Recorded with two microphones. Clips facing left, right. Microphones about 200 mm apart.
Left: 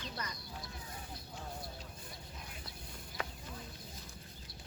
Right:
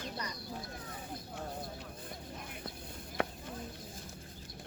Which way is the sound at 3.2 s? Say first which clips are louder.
Right 8 dB; 60° right (ahead or behind).